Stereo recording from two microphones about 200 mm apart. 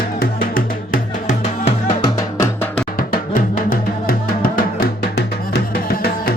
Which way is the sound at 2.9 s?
45° left (ahead or behind).